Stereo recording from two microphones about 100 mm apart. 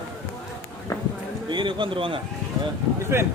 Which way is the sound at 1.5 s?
55° right (ahead or behind).